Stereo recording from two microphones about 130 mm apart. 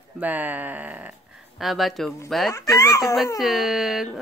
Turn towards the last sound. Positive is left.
turn(degrees=0)  # may be behind; listen again after turning